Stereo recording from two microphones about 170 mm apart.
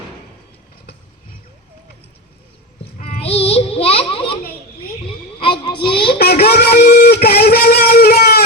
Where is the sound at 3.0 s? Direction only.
35° left (ahead or behind).